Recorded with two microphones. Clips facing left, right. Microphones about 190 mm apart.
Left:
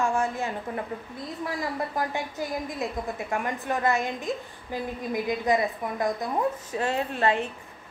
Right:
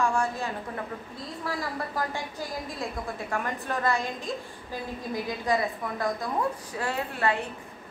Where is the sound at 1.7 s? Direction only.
20° left (ahead or behind).